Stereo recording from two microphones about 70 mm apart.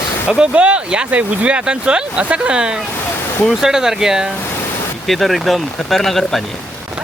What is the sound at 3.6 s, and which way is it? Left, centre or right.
Speech, centre.